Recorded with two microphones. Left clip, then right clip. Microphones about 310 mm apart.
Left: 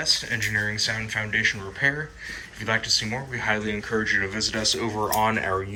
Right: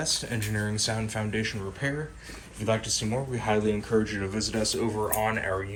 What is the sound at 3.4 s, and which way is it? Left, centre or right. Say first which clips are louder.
Speech: left 1 dB; centre.